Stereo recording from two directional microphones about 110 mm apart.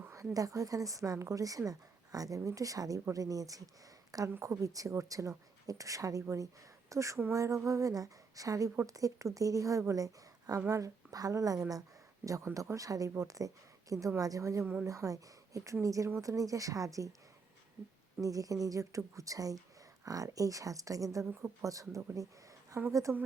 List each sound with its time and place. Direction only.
0.3 s a woman's voice: 30° right (ahead or behind)
18.2 s a woman's voice: 30° right (ahead or behind)